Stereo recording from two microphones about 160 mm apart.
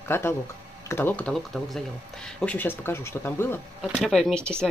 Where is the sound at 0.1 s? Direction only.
15° left (ahead or behind).